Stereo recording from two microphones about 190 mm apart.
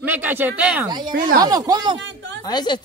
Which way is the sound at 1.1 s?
45° right (ahead or behind).